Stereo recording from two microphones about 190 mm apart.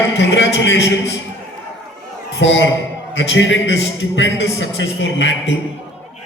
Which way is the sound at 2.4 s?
75° left (ahead or behind).